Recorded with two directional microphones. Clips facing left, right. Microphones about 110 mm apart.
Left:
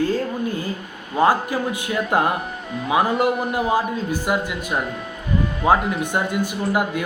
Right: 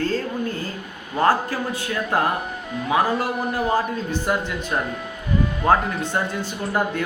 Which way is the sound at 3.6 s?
5° left (ahead or behind).